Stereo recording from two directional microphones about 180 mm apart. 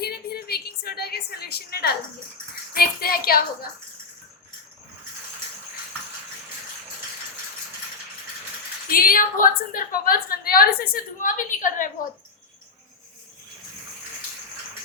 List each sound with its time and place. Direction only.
0.0 s a sound: 60° left (ahead or behind)
2.7 s child singing: 55° left (ahead or behind)
8.9 s a woman's voice: 55° left (ahead or behind)